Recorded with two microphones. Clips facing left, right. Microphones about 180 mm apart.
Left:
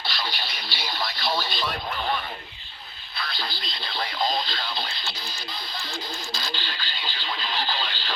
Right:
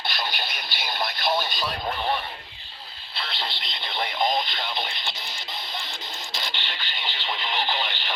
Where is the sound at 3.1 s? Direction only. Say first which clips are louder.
Even; 25° right (ahead or behind).